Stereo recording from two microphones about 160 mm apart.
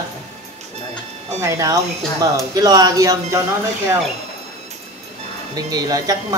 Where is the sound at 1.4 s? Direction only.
20° right (ahead or behind).